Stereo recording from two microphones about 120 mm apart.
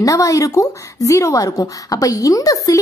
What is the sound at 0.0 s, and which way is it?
A woman's voice, 30° left (ahead or behind).